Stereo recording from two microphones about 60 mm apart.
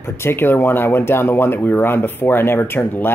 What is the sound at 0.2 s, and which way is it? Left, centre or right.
Speech, left.